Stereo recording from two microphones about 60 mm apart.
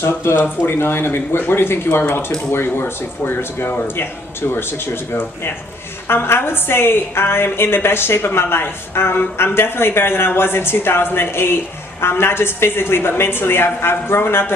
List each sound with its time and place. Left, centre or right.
0.0 s a woman's voice: left
6.1 s a woman's voice: left